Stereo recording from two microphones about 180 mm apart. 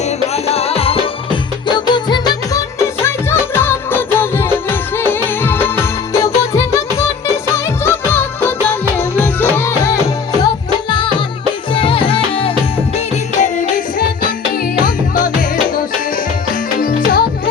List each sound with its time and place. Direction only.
0.0 s music: 35° left (ahead or behind); by 10.0 s 15° left (ahead or behind)
10.8 s music: 25° left (ahead or behind)
13.4 s music: 45° left (ahead or behind)
16.8 s music: 50° left (ahead or behind)